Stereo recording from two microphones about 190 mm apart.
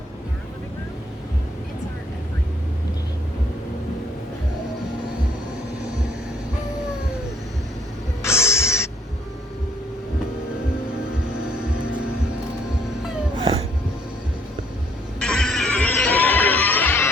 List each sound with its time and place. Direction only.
8.2 s music: 15° left (ahead or behind)
13.4 s a sound: 30° right (ahead or behind)
15.2 s music: 5° left (ahead or behind)